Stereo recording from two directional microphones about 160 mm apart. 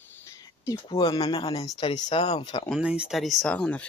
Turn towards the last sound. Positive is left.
turn(degrees=5)  # may be behind; listen again after turning